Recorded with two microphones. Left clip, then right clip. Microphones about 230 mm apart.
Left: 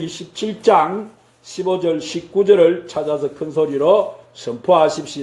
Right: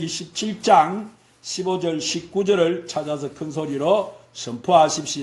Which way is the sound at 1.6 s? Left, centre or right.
Right.